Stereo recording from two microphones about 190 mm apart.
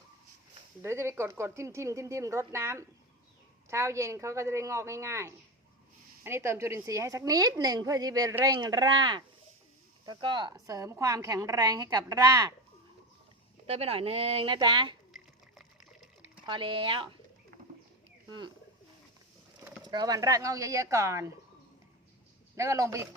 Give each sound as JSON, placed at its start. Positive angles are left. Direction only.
{"t": 0.8, "sound": "a woman's voice", "side_deg": -15}
{"t": 13.7, "sound": "a woman's voice", "side_deg": -30}
{"t": 15.1, "sound": "water", "side_deg": 0}
{"t": 16.5, "sound": "a woman's voice", "side_deg": -25}
{"t": 18.3, "sound": "speech", "side_deg": -25}
{"t": 19.8, "sound": "a woman's voice", "side_deg": -20}
{"t": 22.5, "sound": "a woman's voice", "side_deg": -15}